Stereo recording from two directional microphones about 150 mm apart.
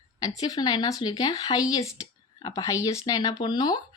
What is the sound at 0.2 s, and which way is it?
Speech, 25° left (ahead or behind).